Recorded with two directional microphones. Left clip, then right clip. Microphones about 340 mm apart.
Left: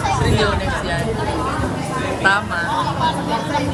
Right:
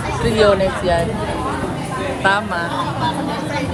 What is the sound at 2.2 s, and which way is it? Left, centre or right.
Speech, centre.